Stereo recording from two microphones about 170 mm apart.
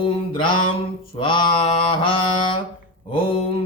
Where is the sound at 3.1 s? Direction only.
30° left (ahead or behind).